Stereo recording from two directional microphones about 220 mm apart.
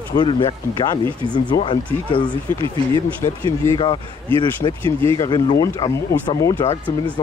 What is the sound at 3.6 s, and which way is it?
Speech, 20° left (ahead or behind).